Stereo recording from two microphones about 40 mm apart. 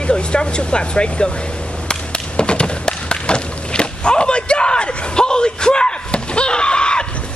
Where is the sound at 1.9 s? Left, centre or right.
Left.